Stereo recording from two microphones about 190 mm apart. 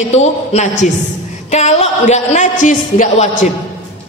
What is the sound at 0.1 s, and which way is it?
A woman's voice, 35° left (ahead or behind).